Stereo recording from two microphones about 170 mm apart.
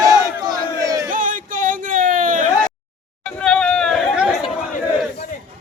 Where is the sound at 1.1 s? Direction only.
50° right (ahead or behind).